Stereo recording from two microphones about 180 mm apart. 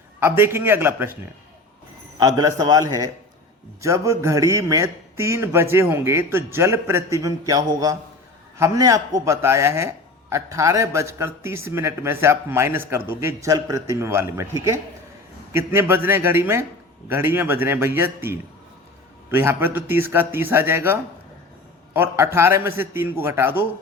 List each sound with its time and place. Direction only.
0.2 s a man's voice: 10° right (ahead or behind)
2.1 s a man's voice: 20° right (ahead or behind)